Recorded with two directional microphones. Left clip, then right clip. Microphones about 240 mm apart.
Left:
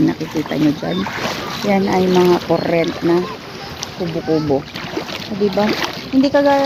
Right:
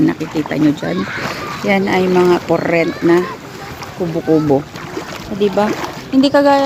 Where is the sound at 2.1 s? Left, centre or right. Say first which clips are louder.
Right 1 dB; centre.